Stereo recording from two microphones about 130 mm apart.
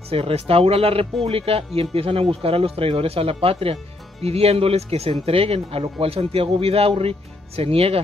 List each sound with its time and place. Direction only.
0.1 s speech: 50° right (ahead or behind)